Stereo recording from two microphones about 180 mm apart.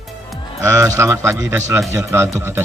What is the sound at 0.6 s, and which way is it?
A man's voice, 15° right (ahead or behind).